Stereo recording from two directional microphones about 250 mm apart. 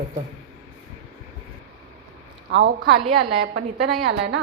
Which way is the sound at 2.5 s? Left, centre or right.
Right.